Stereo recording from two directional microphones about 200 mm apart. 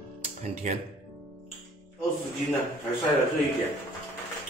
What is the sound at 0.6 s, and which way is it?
Speech, 35° right (ahead or behind).